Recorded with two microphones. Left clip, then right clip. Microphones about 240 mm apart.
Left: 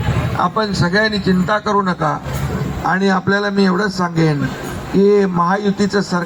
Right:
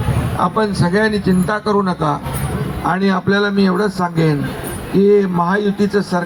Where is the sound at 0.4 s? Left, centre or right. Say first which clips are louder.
Right 1 dB; left.